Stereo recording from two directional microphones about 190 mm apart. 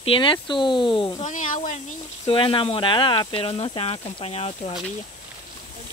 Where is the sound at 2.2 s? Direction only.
25° left (ahead or behind).